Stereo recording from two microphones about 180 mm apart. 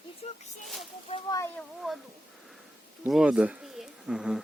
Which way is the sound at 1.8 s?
Centre (ahead or behind).